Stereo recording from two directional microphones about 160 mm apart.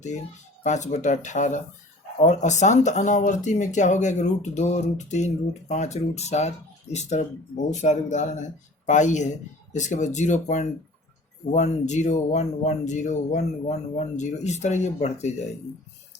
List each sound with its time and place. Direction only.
0.6 s speech: 45° left (ahead or behind)